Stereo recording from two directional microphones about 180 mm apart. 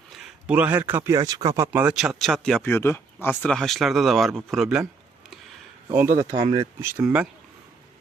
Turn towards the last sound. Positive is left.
turn(degrees=-10)  # may be behind; listen again after turning